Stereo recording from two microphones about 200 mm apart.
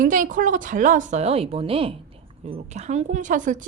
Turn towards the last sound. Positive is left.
turn(degrees=-40)  # may be behind; listen again after turning